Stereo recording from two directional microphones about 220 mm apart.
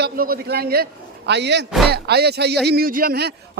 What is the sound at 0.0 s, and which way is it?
A man's voice, 45° right (ahead or behind).